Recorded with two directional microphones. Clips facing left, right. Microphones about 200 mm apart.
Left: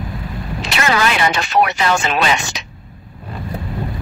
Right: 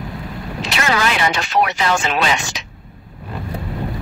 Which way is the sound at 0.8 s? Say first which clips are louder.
Left 2 dB; 65° left (ahead or behind).